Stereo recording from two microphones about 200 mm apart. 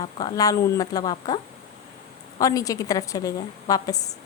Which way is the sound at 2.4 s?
15° left (ahead or behind).